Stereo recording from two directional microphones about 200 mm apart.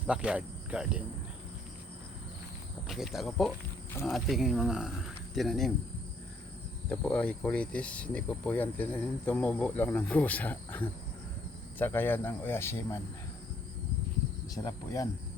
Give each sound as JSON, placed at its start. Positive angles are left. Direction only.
{"t": 0.1, "sound": "speech", "side_deg": -5}
{"t": 2.8, "sound": "speech", "side_deg": 0}
{"t": 6.9, "sound": "speech", "side_deg": 5}
{"t": 14.5, "sound": "speech", "side_deg": 20}